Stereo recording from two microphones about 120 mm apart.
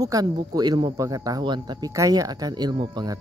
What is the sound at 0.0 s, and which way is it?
Speech, 30° right (ahead or behind).